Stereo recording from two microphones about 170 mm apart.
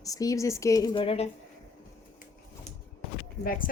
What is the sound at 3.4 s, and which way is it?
Speech, 55° left (ahead or behind).